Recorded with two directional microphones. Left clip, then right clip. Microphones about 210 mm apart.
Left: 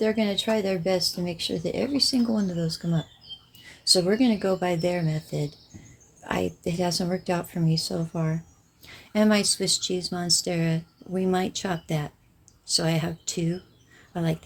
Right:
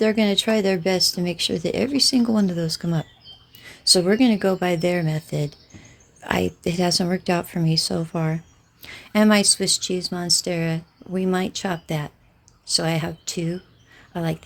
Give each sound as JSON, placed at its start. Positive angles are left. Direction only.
{"t": 0.0, "sound": "speech", "side_deg": -50}